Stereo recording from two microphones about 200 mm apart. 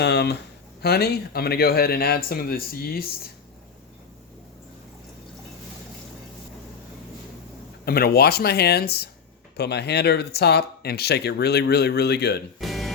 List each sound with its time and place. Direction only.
0.0 s speech: 55° left (ahead or behind)
7.9 s speech: 50° left (ahead or behind)
12.5 s music: centre (ahead or behind)